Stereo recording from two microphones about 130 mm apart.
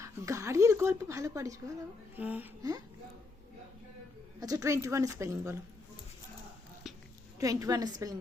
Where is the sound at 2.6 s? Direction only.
30° right (ahead or behind).